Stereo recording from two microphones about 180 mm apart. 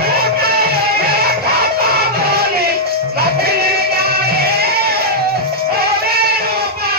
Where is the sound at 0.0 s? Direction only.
60° right (ahead or behind).